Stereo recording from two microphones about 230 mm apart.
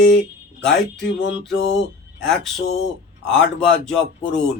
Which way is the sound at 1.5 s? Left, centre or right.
Left.